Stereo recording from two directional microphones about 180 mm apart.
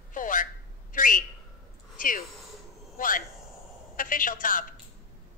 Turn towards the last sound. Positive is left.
turn(degrees=50)  # may be behind; listen again after turning